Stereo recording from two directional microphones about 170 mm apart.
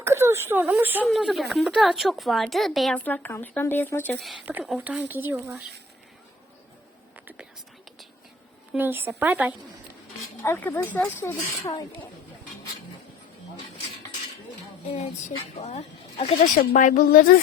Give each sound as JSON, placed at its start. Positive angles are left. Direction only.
{"t": 0.0, "sound": "speech", "side_deg": -15}
{"t": 1.0, "sound": "speech", "side_deg": 0}
{"t": 4.2, "sound": "speech", "side_deg": 0}
{"t": 8.7, "sound": "speech", "side_deg": -10}
{"t": 10.4, "sound": "speech", "side_deg": 15}
{"t": 15.5, "sound": "speech", "side_deg": 40}